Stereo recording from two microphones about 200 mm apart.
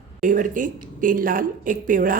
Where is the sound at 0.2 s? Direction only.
40° right (ahead or behind).